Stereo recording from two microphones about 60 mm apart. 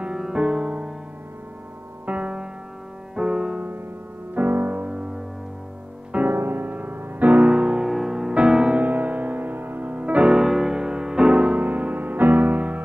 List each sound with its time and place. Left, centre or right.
0.0 s music: centre
2.0 s music: right
3.2 s music: centre
4.4 s music: right
6.3 s music: right; by 7.8 s centre
7.8 s music: centre
8.8 s music: right